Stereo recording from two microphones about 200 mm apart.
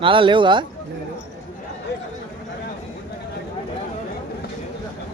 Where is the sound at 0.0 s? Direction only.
25° right (ahead or behind).